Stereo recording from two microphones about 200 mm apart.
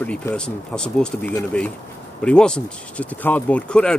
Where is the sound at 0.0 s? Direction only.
5° left (ahead or behind).